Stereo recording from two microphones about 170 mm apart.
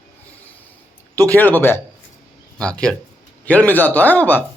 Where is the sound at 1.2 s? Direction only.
10° left (ahead or behind).